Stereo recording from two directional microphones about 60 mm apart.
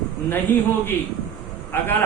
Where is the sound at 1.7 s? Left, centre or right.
Left.